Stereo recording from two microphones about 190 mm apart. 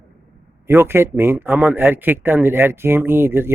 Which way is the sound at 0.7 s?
10° right (ahead or behind).